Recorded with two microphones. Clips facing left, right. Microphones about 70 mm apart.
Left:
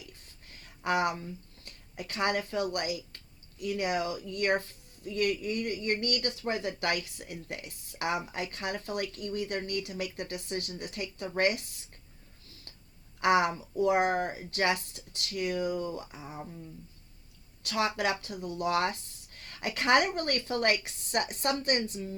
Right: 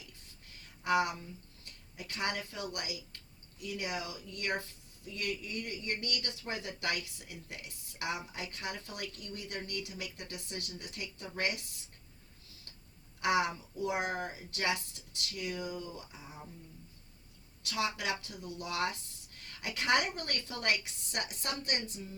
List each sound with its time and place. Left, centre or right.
0.0 s a sound: left
1.2 s speech: left
13.1 s speech: left
17.6 s speech: left